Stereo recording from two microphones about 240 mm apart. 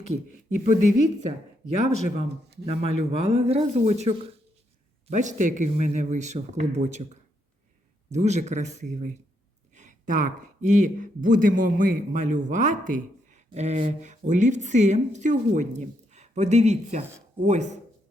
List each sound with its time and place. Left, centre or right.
0.6 s speech: right
2.6 s speech: right